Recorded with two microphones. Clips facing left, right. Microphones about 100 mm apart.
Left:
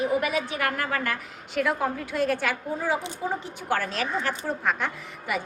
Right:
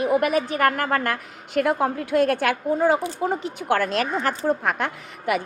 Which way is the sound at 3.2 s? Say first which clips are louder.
Right 5 dB; 70° right (ahead or behind).